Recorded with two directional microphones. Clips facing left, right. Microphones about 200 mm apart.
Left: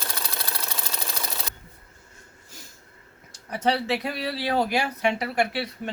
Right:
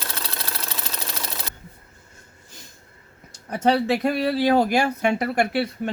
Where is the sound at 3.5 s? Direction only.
45° right (ahead or behind).